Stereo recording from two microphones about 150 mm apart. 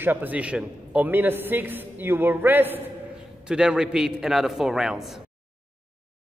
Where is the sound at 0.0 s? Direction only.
10° right (ahead or behind).